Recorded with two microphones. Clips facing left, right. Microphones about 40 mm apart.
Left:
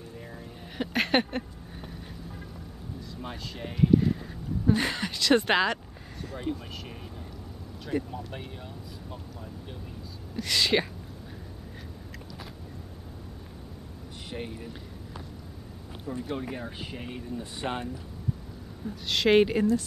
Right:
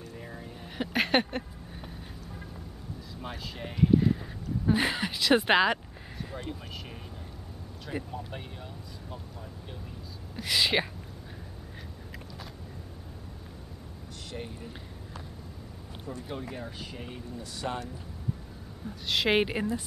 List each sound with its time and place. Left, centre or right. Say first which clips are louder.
0.2 s a sound: even; centre
3.2 s speech: even; centre
7.8 s speech: left 5 dB; centre
10.3 s speech: left 1 dB; centre
14.3 s speech: left 3 dB; left
16.3 s speech: left 2 dB; centre
17.4 s speech: left 1 dB; left
18.9 s speech: left 3 dB; centre